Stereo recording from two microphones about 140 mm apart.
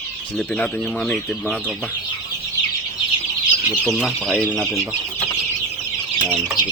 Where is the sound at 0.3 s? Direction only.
5° left (ahead or behind).